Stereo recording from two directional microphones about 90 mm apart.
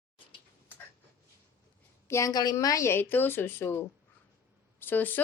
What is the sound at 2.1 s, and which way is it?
Speech, 35° left (ahead or behind).